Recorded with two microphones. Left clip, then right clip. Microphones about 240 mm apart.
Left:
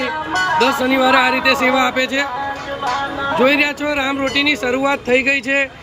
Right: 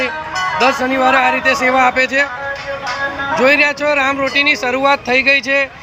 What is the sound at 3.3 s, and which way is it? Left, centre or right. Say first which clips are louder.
Speech: right 3 dB; centre.